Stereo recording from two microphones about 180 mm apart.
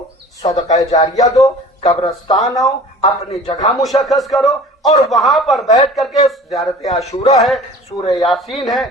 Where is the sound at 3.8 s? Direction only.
Centre (ahead or behind).